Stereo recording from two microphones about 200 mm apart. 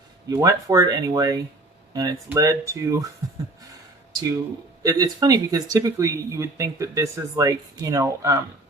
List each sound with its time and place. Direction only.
0.3 s speech: 15° right (ahead or behind)
4.8 s speech: 20° right (ahead or behind)